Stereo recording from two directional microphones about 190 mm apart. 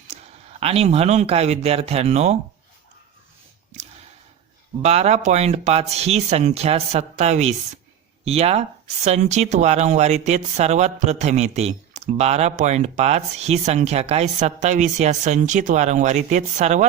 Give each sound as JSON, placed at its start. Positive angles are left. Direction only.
{"t": 0.6, "sound": "speech", "side_deg": -30}
{"t": 4.8, "sound": "speech", "side_deg": -35}